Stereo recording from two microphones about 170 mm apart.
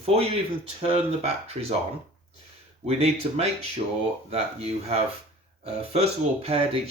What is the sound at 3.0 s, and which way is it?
Speech, 40° right (ahead or behind).